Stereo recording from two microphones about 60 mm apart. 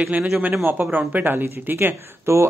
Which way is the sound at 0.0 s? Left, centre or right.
Centre.